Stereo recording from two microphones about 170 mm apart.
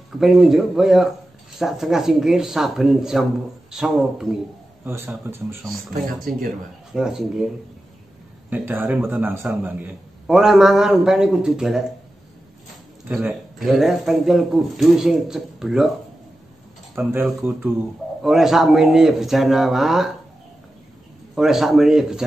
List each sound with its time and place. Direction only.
0.2 s a man's voice: centre (ahead or behind)
4.8 s speech: 15° right (ahead or behind)
6.3 s a man's voice: 60° right (ahead or behind)
6.9 s a man's voice: 5° right (ahead or behind)
8.5 s a man's voice: 10° right (ahead or behind)
13.1 s a man's voice: 5° right (ahead or behind)
17.1 s a man's voice: 10° right (ahead or behind)
21.4 s a man's voice: centre (ahead or behind)